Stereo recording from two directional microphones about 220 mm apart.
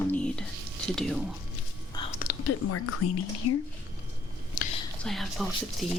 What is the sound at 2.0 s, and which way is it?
Whispering, 20° left (ahead or behind).